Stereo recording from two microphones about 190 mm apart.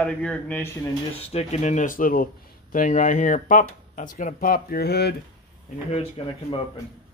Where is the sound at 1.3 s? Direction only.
35° left (ahead or behind); by 5.1 s 60° left (ahead or behind).